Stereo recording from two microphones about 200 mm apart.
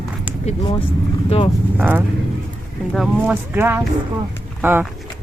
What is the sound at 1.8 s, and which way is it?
Speech, 10° right (ahead or behind).